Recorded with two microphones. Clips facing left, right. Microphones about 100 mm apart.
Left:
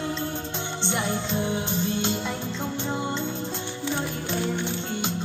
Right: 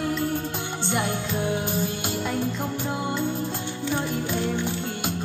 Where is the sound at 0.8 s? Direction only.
5° right (ahead or behind).